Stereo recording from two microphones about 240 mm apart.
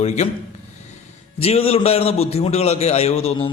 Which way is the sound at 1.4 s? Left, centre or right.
Left.